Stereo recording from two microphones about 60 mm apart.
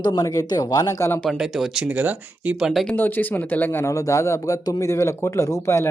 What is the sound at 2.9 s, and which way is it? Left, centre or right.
Speech, left.